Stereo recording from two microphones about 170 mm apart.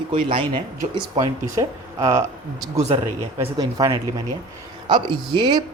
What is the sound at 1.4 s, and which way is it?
Speech, 20° right (ahead or behind).